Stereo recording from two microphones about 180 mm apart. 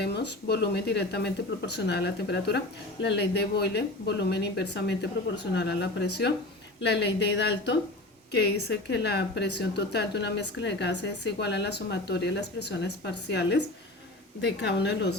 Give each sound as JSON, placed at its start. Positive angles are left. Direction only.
{"t": 0.0, "sound": "a woman's voice", "side_deg": 70}